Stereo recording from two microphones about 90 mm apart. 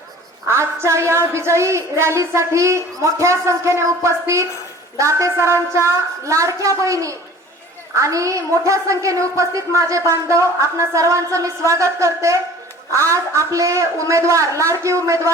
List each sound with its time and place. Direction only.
0.4 s a woman's voice: 30° right (ahead or behind)